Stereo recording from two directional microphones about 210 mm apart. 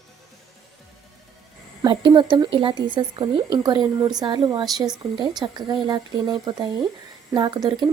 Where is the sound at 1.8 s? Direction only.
20° right (ahead or behind).